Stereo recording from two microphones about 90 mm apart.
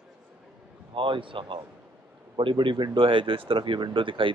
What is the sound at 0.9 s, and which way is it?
A man's voice, 70° right (ahead or behind).